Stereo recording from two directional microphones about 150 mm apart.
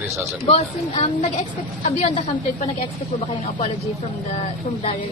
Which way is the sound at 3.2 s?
35° left (ahead or behind).